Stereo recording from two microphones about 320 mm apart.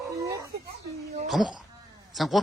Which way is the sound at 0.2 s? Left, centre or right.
Centre.